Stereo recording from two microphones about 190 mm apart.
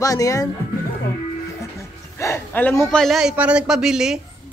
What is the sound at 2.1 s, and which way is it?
A man's voice, 15° left (ahead or behind).